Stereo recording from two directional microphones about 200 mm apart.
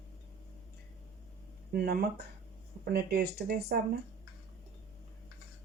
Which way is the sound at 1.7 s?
50° right (ahead or behind).